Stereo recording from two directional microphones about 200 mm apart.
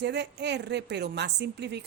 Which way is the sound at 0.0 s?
60° right (ahead or behind).